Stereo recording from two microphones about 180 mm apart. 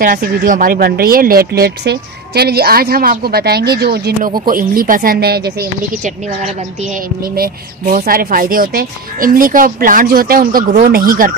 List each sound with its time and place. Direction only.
0.0 s speech: 50° right (ahead or behind)
4.5 s speech: 50° right (ahead or behind)
6.0 s speech: 40° right (ahead or behind)
7.3 s speech: 55° right (ahead or behind)